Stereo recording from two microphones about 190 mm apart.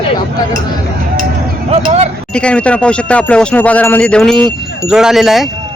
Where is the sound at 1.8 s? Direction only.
35° right (ahead or behind).